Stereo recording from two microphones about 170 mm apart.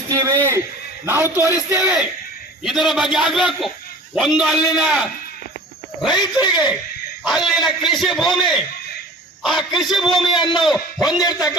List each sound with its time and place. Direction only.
0.1 s a sound: 15° right (ahead or behind)
1.0 s a man's voice: 15° right (ahead or behind)
2.6 s a man's voice: centre (ahead or behind)